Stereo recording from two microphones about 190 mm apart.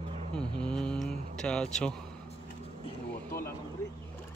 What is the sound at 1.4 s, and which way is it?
Speech, 5° left (ahead or behind).